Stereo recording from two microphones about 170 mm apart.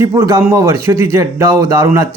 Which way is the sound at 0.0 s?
15° right (ahead or behind).